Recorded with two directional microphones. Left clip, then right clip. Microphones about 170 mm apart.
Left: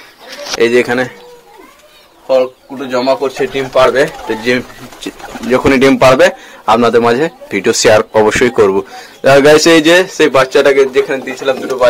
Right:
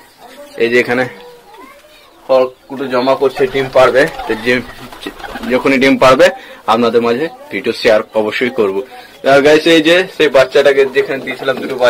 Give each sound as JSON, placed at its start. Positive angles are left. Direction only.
{"t": 0.6, "sound": "a man's voice", "side_deg": 25}
{"t": 2.2, "sound": "speech", "side_deg": 0}
{"t": 3.1, "sound": "speech", "side_deg": -15}
{"t": 3.7, "sound": "speech", "side_deg": 5}
{"t": 4.5, "sound": "speech", "side_deg": 20}
{"t": 5.5, "sound": "a man's voice", "side_deg": 30}
{"t": 6.8, "sound": "speech", "side_deg": 35}
{"t": 9.2, "sound": "speech", "side_deg": 55}